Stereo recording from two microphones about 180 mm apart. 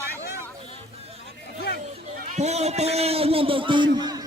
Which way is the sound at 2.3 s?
40° right (ahead or behind).